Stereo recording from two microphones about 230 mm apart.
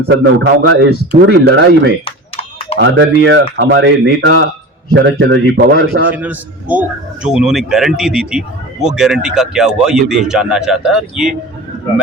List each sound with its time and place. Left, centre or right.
0.1 s a man's voice: right
2.0 s a sound: left
2.7 s a man's voice: right
6.1 s a man's voice: centre